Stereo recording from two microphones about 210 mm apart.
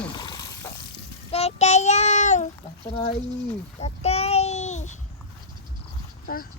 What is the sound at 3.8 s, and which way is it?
Child singing, 30° left (ahead or behind).